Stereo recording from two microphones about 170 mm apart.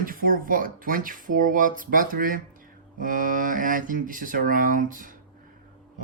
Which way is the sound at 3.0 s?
50° right (ahead or behind).